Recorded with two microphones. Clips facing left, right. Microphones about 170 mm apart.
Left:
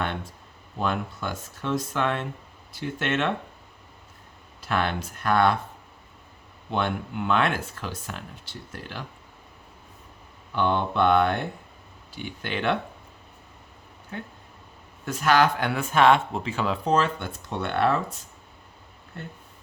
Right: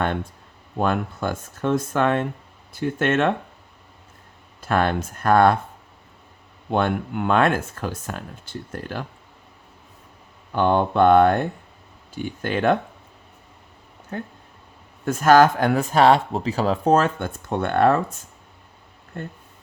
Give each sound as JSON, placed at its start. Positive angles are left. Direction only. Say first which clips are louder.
{"t": 0.8, "sound": "speech", "louder": "right 5 dB", "side_deg": -50}
{"t": 4.6, "sound": "speech", "louder": "right 5 dB", "side_deg": -45}
{"t": 6.7, "sound": "speech", "louder": "right 5 dB", "side_deg": -50}
{"t": 10.5, "sound": "speech", "louder": "right 5 dB", "side_deg": -45}
{"t": 14.1, "sound": "speech", "louder": "right 5 dB", "side_deg": -45}